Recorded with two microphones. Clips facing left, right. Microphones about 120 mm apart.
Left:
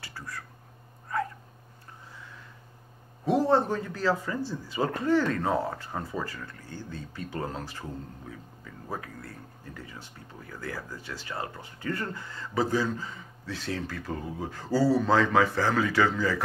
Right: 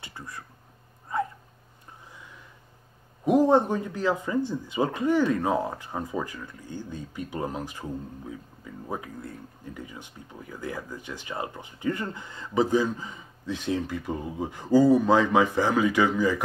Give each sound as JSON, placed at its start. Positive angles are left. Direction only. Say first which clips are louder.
{"t": 0.0, "sound": "a sound", "louder": "even", "side_deg": -20}
{"t": 1.1, "sound": "dog", "louder": "right 2 dB", "side_deg": -20}
{"t": 3.3, "sound": "speech", "louder": "right 3 dB", "side_deg": -15}